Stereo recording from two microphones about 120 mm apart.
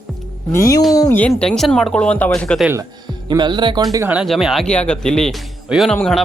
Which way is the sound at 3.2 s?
40° right (ahead or behind).